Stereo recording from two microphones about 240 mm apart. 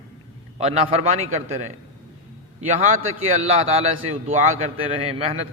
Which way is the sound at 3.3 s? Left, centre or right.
Right.